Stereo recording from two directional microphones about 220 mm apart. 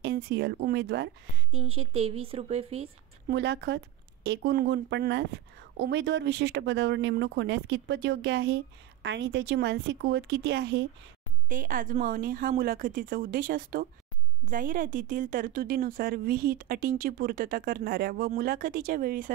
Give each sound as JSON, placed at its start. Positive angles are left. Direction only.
{"t": 0.0, "sound": "speech", "side_deg": -45}
{"t": 1.5, "sound": "speech", "side_deg": -25}
{"t": 3.3, "sound": "speech", "side_deg": -50}
{"t": 11.4, "sound": "a woman's voice", "side_deg": -40}